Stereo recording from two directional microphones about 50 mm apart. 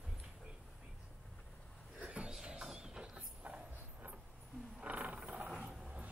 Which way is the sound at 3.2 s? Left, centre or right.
Right.